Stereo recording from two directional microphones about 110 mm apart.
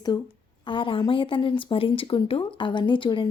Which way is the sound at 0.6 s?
50° left (ahead or behind).